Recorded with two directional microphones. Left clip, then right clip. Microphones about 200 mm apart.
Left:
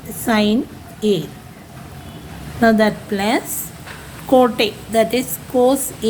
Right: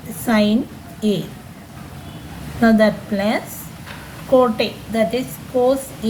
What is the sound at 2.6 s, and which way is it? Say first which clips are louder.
A woman's voice: left 1 dB; 50° left (ahead or behind).